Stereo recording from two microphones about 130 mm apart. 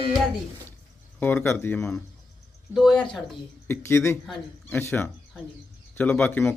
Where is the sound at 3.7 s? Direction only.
20° left (ahead or behind).